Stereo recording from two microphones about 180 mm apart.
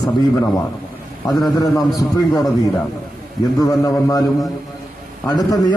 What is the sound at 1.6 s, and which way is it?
Speech, 20° left (ahead or behind).